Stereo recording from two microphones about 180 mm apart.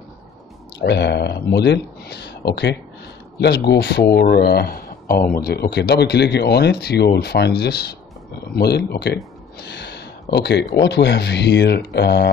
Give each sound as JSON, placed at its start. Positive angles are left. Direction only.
{"t": 0.7, "sound": "speech", "side_deg": 70}